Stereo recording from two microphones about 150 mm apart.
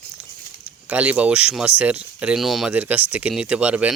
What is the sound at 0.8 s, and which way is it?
Speech, 10° right (ahead or behind).